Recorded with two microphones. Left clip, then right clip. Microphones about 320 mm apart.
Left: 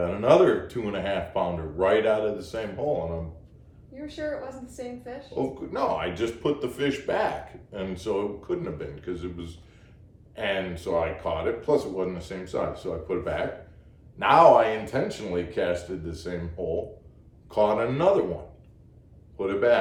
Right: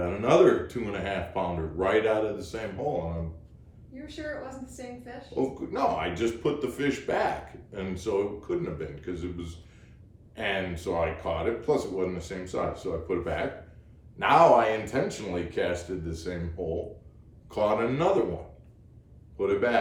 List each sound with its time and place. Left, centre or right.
0.0 s speech: centre
4.6 s speech: centre
17.5 s speech: centre
19.4 s speech: centre